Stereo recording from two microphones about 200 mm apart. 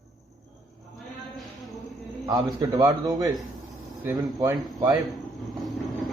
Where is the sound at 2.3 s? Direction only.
20° right (ahead or behind).